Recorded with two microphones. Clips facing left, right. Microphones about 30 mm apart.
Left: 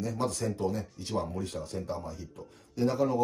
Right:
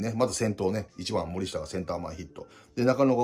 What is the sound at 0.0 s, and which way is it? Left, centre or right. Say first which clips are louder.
Speech: right 5 dB; right.